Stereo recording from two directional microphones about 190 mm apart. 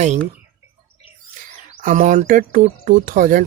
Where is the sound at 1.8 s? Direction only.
40° right (ahead or behind).